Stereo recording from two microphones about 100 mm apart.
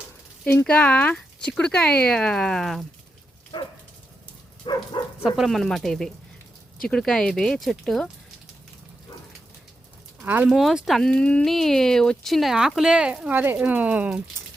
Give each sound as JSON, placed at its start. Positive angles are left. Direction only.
{"t": 0.6, "sound": "speech", "side_deg": 15}
{"t": 3.5, "sound": "dog", "side_deg": 50}
{"t": 5.2, "sound": "speech", "side_deg": -5}
{"t": 10.2, "sound": "speech", "side_deg": -20}
{"t": 10.5, "sound": "speech", "side_deg": 0}
{"t": 11.1, "sound": "speech", "side_deg": 10}